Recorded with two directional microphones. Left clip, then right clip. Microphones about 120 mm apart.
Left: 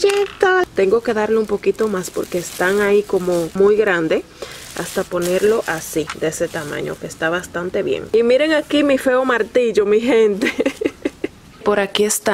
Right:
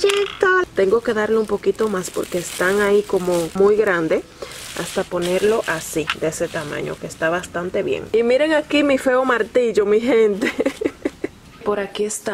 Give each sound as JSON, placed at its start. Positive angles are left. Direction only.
{"t": 0.6, "sound": "speech", "side_deg": 5}
{"t": 11.6, "sound": "a woman's voice", "side_deg": 40}